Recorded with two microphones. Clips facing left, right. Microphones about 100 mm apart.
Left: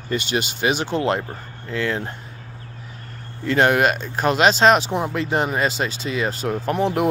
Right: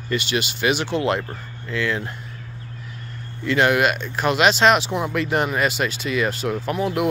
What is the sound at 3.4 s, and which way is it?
Speech, 40° left (ahead or behind).